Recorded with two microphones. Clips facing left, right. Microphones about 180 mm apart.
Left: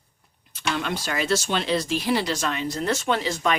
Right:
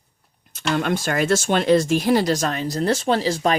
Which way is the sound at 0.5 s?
50° right (ahead or behind).